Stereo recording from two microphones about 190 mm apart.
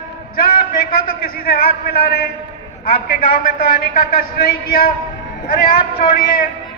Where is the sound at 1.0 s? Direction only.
50° left (ahead or behind).